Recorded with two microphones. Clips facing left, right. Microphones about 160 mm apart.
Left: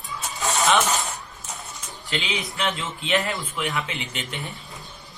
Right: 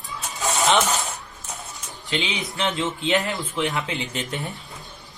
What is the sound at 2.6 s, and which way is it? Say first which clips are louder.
A man's voice: right 6 dB; 20° right (ahead or behind).